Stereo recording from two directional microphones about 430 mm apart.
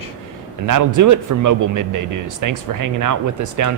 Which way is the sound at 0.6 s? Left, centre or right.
Right.